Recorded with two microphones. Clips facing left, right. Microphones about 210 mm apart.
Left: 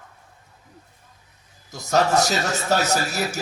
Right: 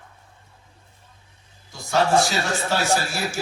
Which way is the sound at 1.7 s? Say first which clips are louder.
Even; 40° left (ahead or behind).